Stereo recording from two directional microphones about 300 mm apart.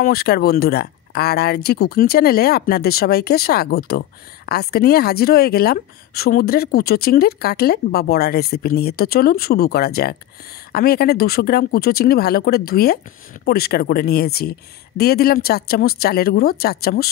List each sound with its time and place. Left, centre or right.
0.0 s a woman's voice: left